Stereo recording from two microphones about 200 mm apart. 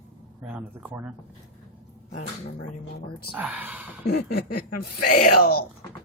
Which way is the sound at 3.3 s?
5° right (ahead or behind).